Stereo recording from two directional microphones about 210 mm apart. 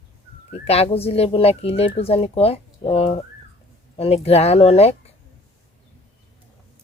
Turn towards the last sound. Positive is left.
turn(degrees=30)  # may be behind; listen again after turning